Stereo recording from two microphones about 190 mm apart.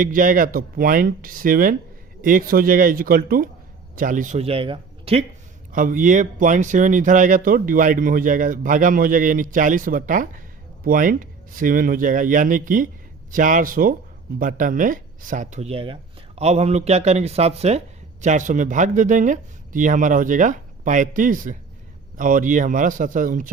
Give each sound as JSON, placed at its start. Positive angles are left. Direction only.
{"t": 0.0, "sound": "a man's voice", "side_deg": -45}
{"t": 5.7, "sound": "speech", "side_deg": -45}